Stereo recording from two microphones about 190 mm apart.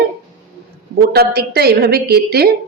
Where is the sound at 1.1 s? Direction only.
55° right (ahead or behind).